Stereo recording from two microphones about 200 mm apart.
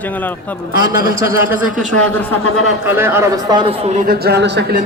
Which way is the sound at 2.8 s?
10° right (ahead or behind).